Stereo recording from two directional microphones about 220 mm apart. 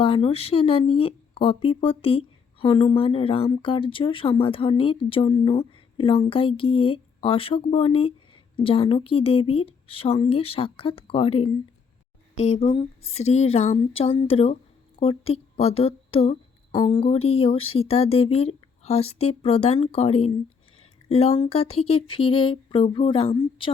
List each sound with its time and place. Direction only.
0.0 s speech: 25° left (ahead or behind)